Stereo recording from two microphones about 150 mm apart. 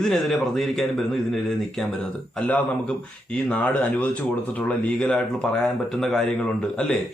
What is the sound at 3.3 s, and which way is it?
Speech, 5° left (ahead or behind).